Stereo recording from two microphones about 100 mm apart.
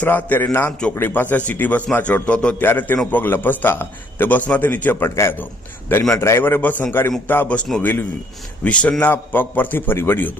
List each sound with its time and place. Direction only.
0.0 s a man's voice: 15° left (ahead or behind)